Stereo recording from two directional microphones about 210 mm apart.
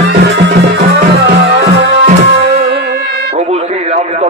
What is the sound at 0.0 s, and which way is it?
Music, 55° right (ahead or behind).